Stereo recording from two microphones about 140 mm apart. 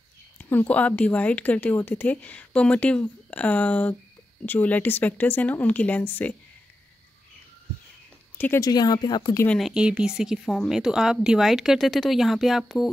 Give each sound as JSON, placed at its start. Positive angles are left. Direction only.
{"t": 0.4, "sound": "a woman's voice", "side_deg": 15}
{"t": 8.5, "sound": "speech", "side_deg": 30}
{"t": 9.5, "sound": "a woman's voice", "side_deg": 0}